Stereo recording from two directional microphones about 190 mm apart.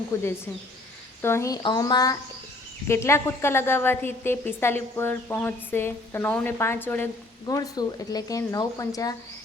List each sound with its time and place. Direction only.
0.1 s a woman's voice: 15° left (ahead or behind)